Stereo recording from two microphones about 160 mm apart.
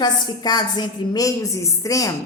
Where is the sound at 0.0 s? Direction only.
25° left (ahead or behind).